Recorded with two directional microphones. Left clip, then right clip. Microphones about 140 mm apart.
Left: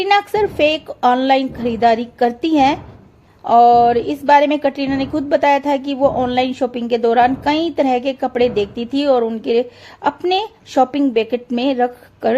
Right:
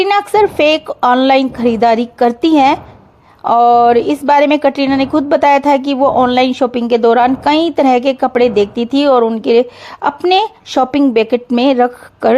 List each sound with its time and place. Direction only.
0.0 s a woman's voice: 25° right (ahead or behind)